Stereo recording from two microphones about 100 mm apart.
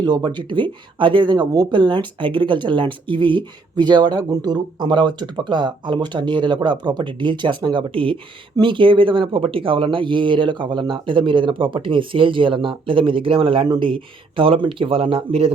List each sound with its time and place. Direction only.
0.0 s speech: 45° right (ahead or behind); by 15.5 s 70° right (ahead or behind)